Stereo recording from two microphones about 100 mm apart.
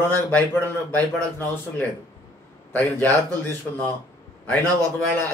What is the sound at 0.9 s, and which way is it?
Speech, 15° left (ahead or behind).